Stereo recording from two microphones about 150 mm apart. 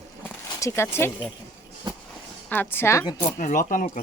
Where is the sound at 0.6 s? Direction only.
15° left (ahead or behind).